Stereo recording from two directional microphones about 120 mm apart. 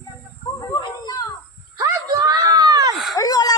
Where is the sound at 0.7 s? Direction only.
30° left (ahead or behind).